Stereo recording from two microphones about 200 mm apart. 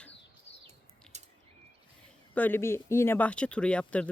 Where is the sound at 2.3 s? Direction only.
10° left (ahead or behind).